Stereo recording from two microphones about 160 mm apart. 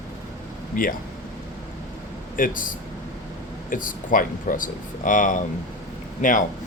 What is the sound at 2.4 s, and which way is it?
Speech, 60° left (ahead or behind).